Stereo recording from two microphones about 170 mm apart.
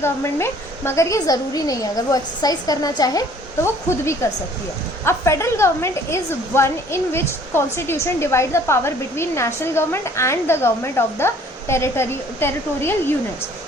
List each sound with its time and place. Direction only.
0.0 s a woman's voice: 15° left (ahead or behind)